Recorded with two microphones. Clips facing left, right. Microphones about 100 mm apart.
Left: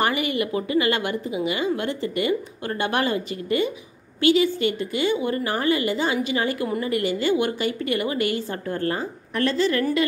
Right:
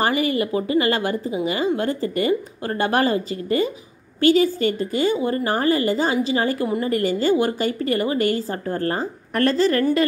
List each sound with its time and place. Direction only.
0.0 s a woman's voice: 35° right (ahead or behind)
9.3 s a woman's voice: 45° right (ahead or behind)